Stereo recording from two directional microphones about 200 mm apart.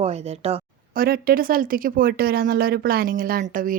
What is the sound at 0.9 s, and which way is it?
Speech, 45° right (ahead or behind).